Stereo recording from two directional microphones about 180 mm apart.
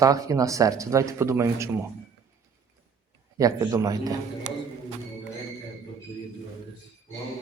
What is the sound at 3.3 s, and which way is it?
Speech, 20° right (ahead or behind).